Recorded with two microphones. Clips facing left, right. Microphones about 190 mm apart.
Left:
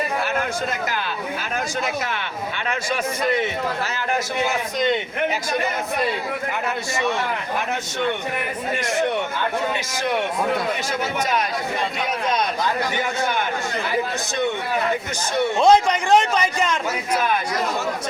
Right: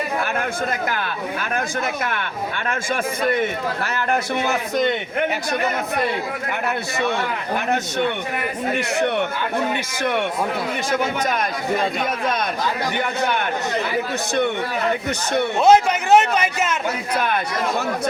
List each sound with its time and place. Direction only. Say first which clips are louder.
13.0 s a man's voice: right 1 dB; 60° right (ahead or behind)
15.6 s a man's voice: right 1 dB; 5° right (ahead or behind)